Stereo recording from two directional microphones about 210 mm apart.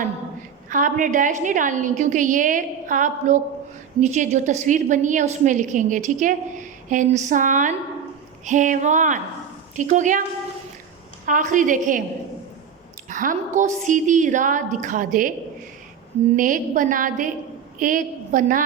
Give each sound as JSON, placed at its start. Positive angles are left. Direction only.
{"t": 0.7, "sound": "a woman's voice", "side_deg": -40}
{"t": 11.3, "sound": "a woman's voice", "side_deg": -40}
{"t": 13.1, "sound": "a sound", "side_deg": -40}
{"t": 13.6, "sound": "a woman's voice", "side_deg": -35}
{"t": 16.3, "sound": "a woman's voice", "side_deg": -40}